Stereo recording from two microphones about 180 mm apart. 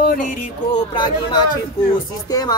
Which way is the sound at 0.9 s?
25° left (ahead or behind).